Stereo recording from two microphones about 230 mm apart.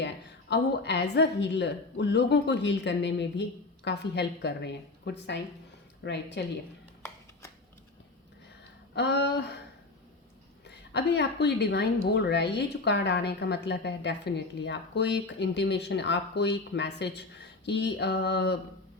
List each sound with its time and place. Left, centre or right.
0.5 s a woman's voice: left
9.0 s a woman's voice: left
10.7 s a woman's voice: left